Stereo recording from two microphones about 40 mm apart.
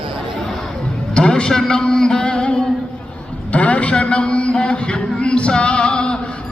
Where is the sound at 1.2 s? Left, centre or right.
Left.